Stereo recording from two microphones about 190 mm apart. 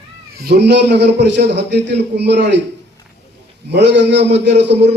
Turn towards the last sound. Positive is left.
turn(degrees=-65)  # may be behind; listen again after turning